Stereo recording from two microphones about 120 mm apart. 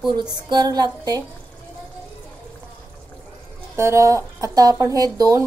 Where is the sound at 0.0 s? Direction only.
35° right (ahead or behind).